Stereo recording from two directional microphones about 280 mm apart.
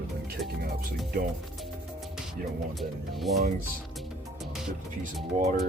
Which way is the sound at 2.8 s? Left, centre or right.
Centre.